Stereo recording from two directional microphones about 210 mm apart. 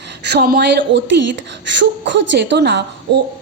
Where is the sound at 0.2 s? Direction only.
50° right (ahead or behind).